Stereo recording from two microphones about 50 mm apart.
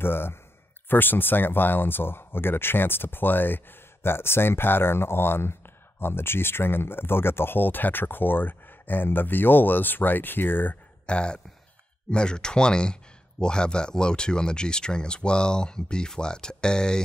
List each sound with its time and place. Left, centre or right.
0.0 s speech: left
11.1 s speech: centre